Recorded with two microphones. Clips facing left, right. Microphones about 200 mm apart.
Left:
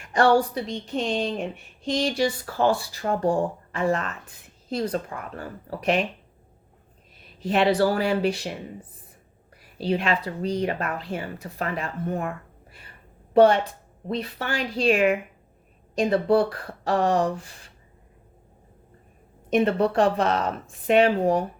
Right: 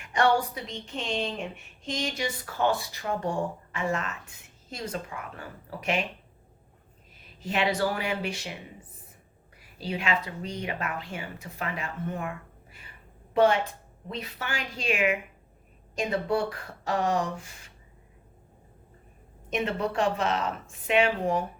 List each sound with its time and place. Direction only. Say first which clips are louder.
0.1 s speech: left 5 dB; 35° left (ahead or behind)
7.4 s speech: left 6 dB; 35° left (ahead or behind)
10.0 s speech: left 4 dB; 35° left (ahead or behind)
19.8 s speech: left 6 dB; 35° left (ahead or behind)